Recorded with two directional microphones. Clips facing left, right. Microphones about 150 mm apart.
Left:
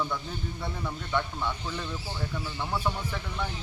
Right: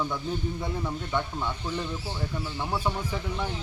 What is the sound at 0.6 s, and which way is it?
A man's voice, 15° right (ahead or behind).